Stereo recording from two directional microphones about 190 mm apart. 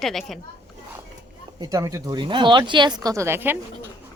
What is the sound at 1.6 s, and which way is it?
Speech, 15° right (ahead or behind).